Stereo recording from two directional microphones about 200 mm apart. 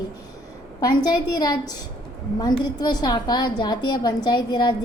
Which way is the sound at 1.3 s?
20° left (ahead or behind).